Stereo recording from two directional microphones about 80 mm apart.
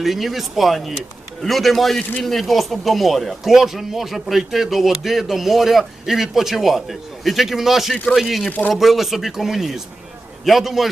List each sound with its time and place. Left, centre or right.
0.0 s speech: centre
2.0 s speech: centre
2.2 s speech: centre
8.4 s speech: centre
8.7 s speech: centre